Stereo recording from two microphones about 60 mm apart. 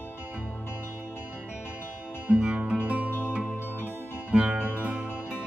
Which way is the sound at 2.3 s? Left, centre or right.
Centre.